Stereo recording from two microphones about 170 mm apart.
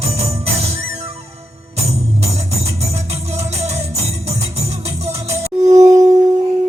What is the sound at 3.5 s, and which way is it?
Music, 40° right (ahead or behind).